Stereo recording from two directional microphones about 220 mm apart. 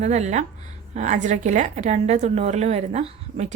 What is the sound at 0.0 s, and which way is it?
A woman's voice, 30° right (ahead or behind).